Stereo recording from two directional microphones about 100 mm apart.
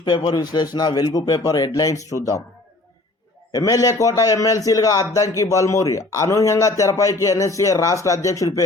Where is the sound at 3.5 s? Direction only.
35° left (ahead or behind).